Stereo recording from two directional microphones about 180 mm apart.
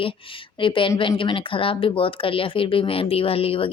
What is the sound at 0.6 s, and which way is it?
Speech, 30° left (ahead or behind).